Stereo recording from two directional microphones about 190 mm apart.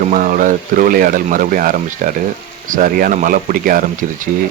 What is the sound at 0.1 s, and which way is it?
Speech, 45° right (ahead or behind).